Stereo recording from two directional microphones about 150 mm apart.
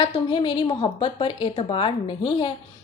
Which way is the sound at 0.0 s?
30° left (ahead or behind).